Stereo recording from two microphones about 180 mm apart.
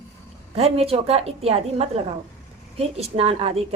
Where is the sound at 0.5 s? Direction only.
35° right (ahead or behind).